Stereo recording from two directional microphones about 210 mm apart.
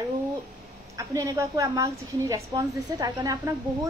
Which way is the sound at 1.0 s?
15° right (ahead or behind).